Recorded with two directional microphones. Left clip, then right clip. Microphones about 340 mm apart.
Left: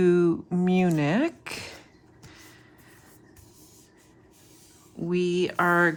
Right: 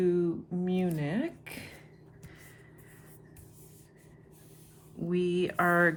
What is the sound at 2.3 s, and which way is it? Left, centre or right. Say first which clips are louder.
Vehicle: left 5 dB; centre.